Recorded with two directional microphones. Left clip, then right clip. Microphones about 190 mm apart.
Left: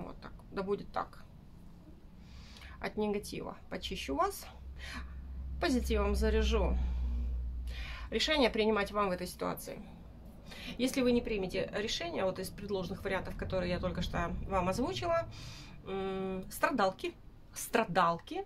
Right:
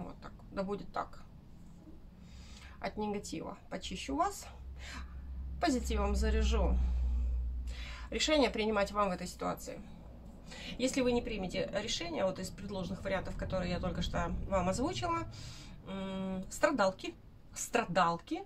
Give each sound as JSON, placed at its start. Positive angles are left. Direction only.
{"t": 0.0, "sound": "a sound", "side_deg": 45}
{"t": 2.8, "sound": "a woman's voice", "side_deg": 40}
{"t": 7.7, "sound": "a woman's voice", "side_deg": 35}